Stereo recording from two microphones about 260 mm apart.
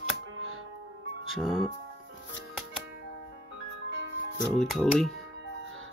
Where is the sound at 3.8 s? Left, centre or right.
Right.